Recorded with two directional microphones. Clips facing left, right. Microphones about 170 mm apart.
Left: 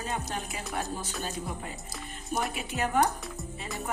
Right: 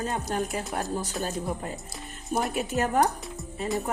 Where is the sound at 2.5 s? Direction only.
45° right (ahead or behind).